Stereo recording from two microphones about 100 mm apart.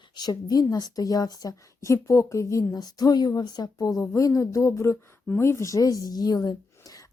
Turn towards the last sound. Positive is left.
turn(degrees=40)  # may be behind; listen again after turning